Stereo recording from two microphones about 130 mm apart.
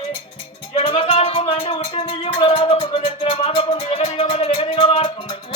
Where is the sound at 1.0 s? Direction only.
50° left (ahead or behind).